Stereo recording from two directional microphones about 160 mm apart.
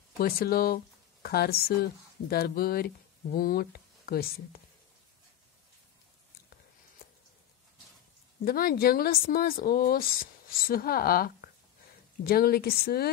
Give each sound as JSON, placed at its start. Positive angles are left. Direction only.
{"t": 0.2, "sound": "speech", "side_deg": 65}
{"t": 1.2, "sound": "speech", "side_deg": 75}
{"t": 7.0, "sound": "a sound", "side_deg": 70}
{"t": 8.5, "sound": "speech", "side_deg": 65}